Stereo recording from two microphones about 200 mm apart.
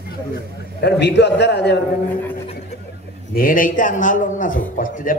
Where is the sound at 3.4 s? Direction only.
45° left (ahead or behind).